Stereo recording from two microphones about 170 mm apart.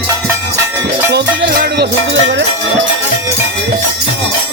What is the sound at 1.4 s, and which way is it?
Music, 60° right (ahead or behind).